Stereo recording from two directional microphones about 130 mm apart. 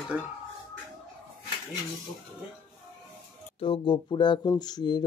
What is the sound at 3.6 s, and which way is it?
Speech, 40° left (ahead or behind).